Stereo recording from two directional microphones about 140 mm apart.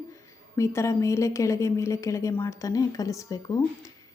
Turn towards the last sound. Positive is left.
turn(degrees=25)  # may be behind; listen again after turning